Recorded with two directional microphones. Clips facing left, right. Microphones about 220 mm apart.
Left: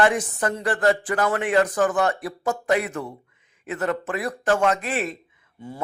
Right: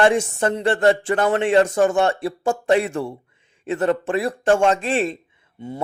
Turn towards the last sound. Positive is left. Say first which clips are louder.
# right 4 dB
turn(degrees=-20)  # may be behind; listen again after turning